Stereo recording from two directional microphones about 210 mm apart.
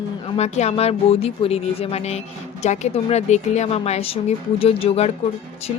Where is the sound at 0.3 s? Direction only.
30° left (ahead or behind).